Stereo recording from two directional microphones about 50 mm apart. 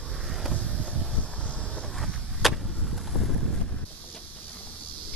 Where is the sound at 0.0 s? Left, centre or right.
Centre.